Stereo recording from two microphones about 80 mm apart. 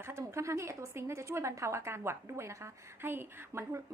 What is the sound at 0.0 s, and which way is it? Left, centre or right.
A woman's voice, right.